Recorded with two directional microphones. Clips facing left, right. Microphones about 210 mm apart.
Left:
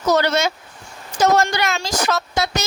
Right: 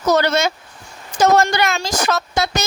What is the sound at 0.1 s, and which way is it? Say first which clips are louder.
Speech: right 1 dB; 50° right (ahead or behind).